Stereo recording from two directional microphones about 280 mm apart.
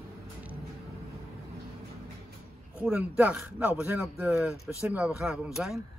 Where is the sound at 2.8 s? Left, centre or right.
Centre.